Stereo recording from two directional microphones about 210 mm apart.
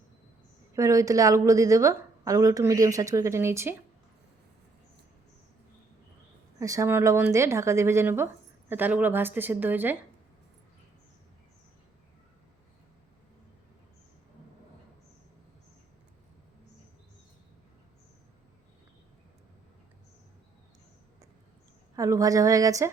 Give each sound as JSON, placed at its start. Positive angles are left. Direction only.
{"t": 0.7, "sound": "a woman's voice", "side_deg": -15}
{"t": 6.6, "sound": "a woman's voice", "side_deg": -15}
{"t": 21.9, "sound": "a woman's voice", "side_deg": -15}